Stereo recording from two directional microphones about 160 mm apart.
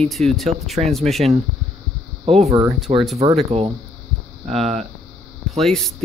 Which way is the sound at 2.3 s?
40° right (ahead or behind).